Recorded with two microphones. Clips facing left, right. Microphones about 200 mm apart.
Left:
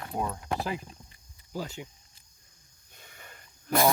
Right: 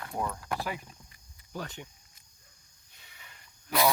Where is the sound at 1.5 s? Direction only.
10° left (ahead or behind).